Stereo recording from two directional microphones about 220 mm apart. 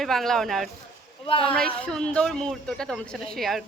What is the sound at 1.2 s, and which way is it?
Speech, 25° left (ahead or behind).